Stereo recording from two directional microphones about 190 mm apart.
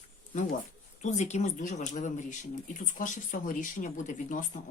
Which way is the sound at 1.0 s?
40° left (ahead or behind).